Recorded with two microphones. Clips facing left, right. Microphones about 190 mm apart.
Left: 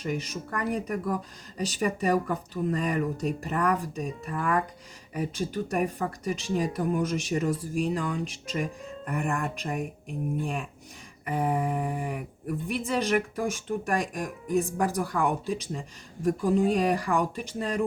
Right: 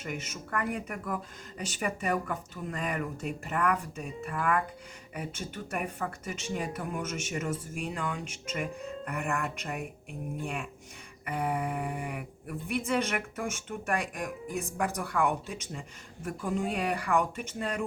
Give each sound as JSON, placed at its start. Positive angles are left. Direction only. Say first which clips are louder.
{"t": 0.0, "sound": "speech", "louder": "left 6 dB", "side_deg": 35}